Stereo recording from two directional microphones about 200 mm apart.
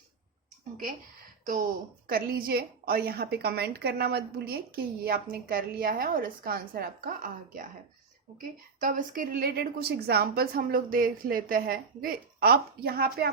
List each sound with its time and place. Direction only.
2.0 s a woman's voice: 45° right (ahead or behind)